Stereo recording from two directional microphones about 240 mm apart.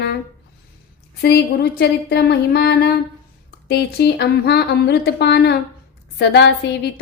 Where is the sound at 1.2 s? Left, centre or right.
Left.